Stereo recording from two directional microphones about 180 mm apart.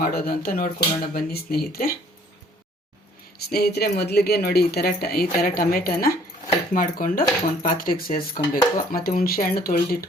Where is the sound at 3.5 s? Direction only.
60° left (ahead or behind).